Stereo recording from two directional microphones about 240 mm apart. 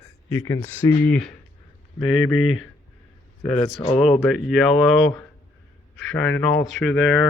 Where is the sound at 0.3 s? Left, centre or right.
Centre.